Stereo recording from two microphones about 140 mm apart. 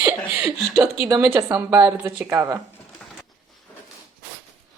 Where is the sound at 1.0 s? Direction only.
20° right (ahead or behind).